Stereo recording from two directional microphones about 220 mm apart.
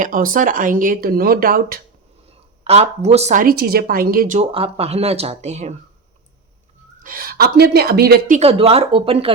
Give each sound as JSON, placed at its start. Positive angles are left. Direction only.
{"t": 0.0, "sound": "speech", "side_deg": -40}
{"t": 2.6, "sound": "speech", "side_deg": -30}
{"t": 7.0, "sound": "speech", "side_deg": -40}
{"t": 8.4, "sound": "speech", "side_deg": -25}